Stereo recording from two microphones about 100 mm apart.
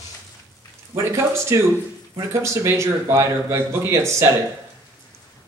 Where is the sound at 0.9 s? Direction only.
30° right (ahead or behind).